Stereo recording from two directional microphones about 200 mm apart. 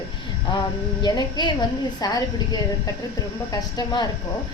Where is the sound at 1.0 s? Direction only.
20° left (ahead or behind).